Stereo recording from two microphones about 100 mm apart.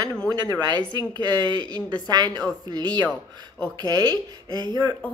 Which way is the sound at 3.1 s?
10° left (ahead or behind).